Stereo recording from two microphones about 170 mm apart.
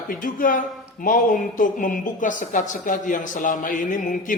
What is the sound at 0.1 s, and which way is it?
A woman's voice, 55° left (ahead or behind).